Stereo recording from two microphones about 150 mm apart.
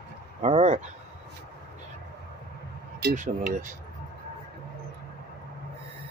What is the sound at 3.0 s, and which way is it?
Speech, 75° right (ahead or behind).